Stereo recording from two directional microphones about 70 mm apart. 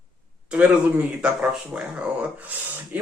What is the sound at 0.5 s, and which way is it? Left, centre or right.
Speech, centre.